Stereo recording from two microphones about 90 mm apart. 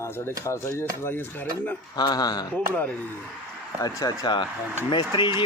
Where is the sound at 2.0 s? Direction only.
50° left (ahead or behind).